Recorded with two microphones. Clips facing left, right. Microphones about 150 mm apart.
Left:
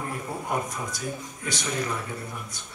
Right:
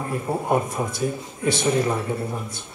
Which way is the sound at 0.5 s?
25° right (ahead or behind).